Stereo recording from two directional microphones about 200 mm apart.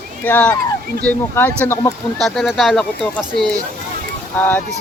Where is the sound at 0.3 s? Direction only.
10° left (ahead or behind).